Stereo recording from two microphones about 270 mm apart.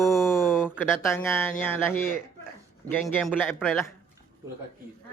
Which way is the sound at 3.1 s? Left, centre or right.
Centre.